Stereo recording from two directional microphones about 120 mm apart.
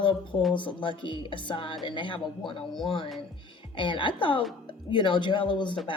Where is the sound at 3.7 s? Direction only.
45° left (ahead or behind).